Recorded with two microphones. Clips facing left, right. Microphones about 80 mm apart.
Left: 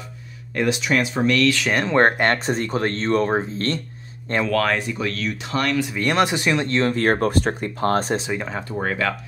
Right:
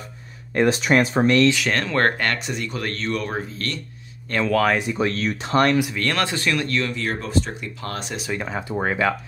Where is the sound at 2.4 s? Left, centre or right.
Left.